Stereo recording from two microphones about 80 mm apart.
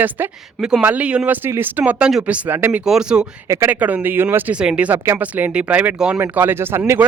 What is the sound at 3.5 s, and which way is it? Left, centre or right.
Speech, right.